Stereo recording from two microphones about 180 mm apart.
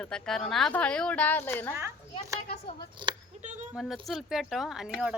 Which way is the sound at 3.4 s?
40° right (ahead or behind).